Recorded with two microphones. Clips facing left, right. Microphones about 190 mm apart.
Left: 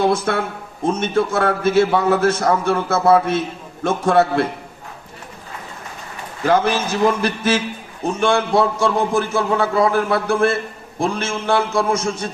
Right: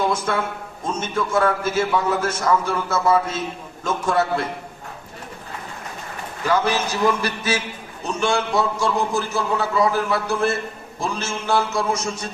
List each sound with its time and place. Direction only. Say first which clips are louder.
0.0 s a man's voice: left 4 dB; 65° left (ahead or behind)
6.4 s a man's voice: left 4 dB; 50° left (ahead or behind)